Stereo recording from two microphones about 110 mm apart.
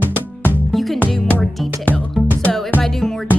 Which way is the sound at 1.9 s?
15° left (ahead or behind).